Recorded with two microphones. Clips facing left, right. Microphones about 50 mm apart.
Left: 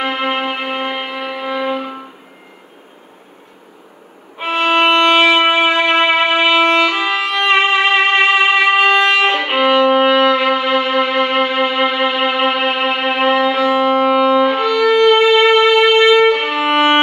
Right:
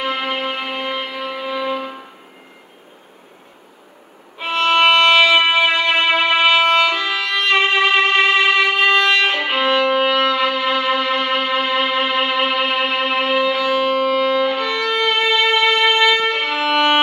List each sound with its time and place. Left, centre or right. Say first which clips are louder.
0.0 s music: left 3 dB; left
4.4 s violin: left 1 dB; centre
9.4 s music: left 4 dB; centre
11.6 s music: left 4 dB; left
12.0 s music: left 3 dB; centre; by 14.2 s left
14.2 s violin: left 5 dB; left
15.0 s violin: left 7 dB; centre